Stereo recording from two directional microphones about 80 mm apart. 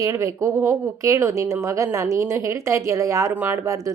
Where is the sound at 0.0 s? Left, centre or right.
Right.